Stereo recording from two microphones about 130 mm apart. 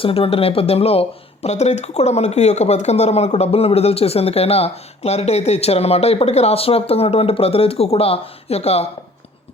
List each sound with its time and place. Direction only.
0.0 s speech: 45° left (ahead or behind)